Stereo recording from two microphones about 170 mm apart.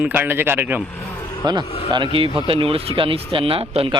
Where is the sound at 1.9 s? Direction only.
30° right (ahead or behind).